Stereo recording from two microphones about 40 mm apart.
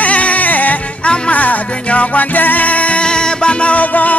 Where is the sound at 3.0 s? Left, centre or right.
Left.